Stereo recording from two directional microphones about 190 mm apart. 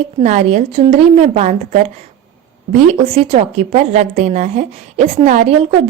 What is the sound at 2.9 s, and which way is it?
A woman's voice, 30° right (ahead or behind).